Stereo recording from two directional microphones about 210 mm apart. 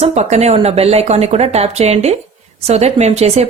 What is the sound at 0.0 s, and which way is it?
Speech, 30° right (ahead or behind).